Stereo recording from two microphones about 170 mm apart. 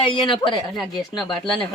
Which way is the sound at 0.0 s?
30° left (ahead or behind).